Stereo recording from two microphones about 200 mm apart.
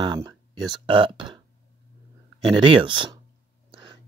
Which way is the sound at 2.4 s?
25° right (ahead or behind).